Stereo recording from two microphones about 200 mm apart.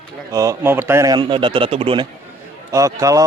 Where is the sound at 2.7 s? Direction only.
15° right (ahead or behind).